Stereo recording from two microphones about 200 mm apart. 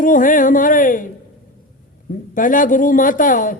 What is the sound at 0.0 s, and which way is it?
A man's voice, 40° left (ahead or behind).